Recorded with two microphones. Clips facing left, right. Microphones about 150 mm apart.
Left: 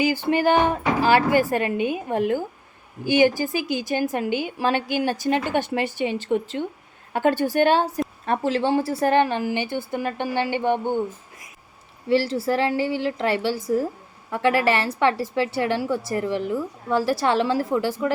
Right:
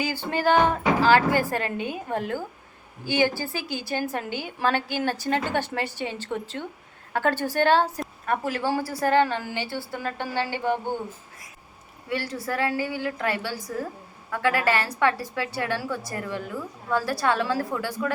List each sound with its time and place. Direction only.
0.0 s a woman's voice: 15° left (ahead or behind)
8.2 s a woman's voice: 25° left (ahead or behind)
12.0 s a woman's voice: 30° left (ahead or behind)